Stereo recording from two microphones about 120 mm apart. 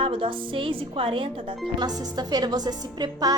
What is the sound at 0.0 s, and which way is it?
Speech, 45° right (ahead or behind).